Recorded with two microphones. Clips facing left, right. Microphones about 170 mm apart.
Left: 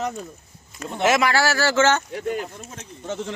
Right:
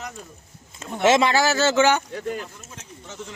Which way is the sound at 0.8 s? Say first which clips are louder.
Right 2 dB; 25° right (ahead or behind).